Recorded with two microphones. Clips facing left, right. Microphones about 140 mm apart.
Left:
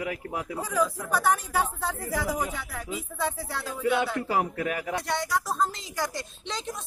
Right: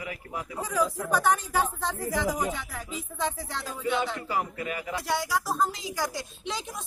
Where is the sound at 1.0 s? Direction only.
5° left (ahead or behind).